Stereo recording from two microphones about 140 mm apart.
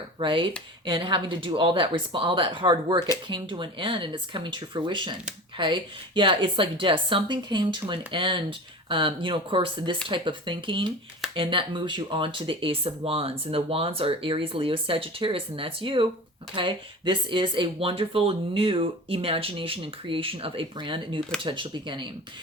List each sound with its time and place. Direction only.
0.2 s speech: 35° right (ahead or behind)